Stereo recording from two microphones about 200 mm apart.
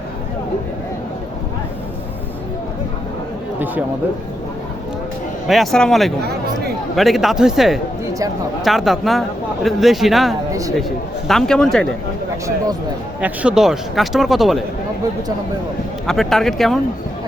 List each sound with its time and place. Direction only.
5.5 s speech: centre (ahead or behind)
10.5 s speech: 15° right (ahead or behind)
10.8 s speech: centre (ahead or behind)
13.2 s speech: 5° right (ahead or behind)
16.0 s speech: centre (ahead or behind)